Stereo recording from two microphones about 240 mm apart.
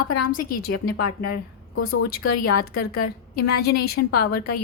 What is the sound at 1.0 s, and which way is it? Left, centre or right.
Speech, left.